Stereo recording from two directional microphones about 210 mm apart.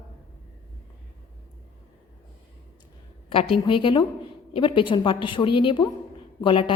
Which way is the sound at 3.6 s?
25° left (ahead or behind).